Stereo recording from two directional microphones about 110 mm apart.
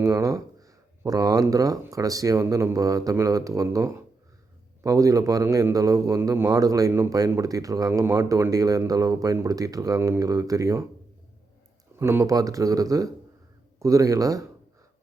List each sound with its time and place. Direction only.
0.0 s a man's voice: 30° right (ahead or behind)
11.9 s a man's voice: 25° right (ahead or behind)